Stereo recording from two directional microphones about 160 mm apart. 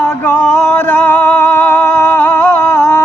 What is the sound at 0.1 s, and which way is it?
Music, 15° left (ahead or behind).